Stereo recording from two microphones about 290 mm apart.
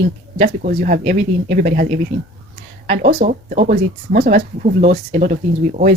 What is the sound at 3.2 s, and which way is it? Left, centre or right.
Speech, right.